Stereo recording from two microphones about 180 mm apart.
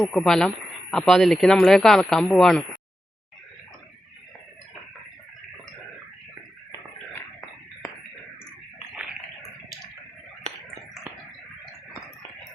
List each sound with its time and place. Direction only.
0.0 s speech: 5° left (ahead or behind)